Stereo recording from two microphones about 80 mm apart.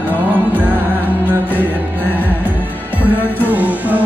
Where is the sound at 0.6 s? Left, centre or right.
Right.